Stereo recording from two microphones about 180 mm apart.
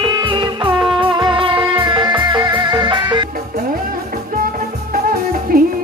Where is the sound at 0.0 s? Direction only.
25° right (ahead or behind).